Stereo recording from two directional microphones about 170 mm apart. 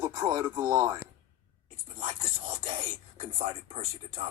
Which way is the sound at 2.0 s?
35° right (ahead or behind).